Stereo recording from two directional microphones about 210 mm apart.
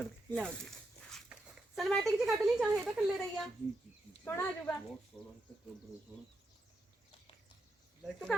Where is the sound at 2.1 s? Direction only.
Centre (ahead or behind).